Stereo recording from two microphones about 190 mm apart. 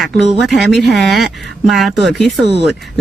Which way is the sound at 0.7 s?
Centre (ahead or behind).